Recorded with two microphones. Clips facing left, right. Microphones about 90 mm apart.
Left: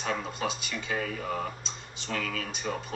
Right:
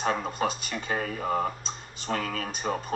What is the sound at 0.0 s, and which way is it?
Speech, 40° right (ahead or behind).